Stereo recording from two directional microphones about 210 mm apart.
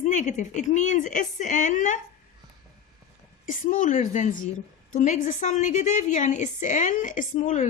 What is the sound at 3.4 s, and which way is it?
A woman's voice, 40° left (ahead or behind).